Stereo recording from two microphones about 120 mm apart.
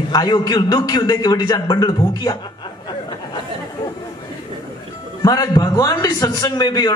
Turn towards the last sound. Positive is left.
turn(degrees=30)  # may be behind; listen again after turning